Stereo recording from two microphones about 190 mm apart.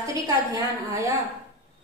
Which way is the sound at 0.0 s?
15° right (ahead or behind).